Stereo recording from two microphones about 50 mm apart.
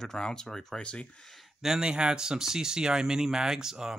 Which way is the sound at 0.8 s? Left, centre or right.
Left.